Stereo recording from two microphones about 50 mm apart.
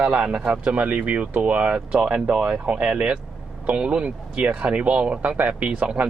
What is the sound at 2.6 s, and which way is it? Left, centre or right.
Speech, right.